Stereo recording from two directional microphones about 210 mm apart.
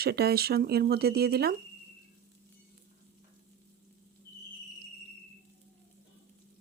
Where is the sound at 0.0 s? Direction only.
50° right (ahead or behind).